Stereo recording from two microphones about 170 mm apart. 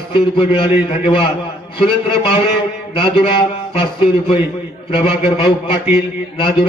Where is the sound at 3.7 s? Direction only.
30° left (ahead or behind).